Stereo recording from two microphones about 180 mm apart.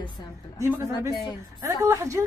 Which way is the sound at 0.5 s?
15° right (ahead or behind).